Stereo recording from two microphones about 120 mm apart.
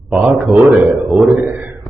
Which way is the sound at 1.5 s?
15° right (ahead or behind).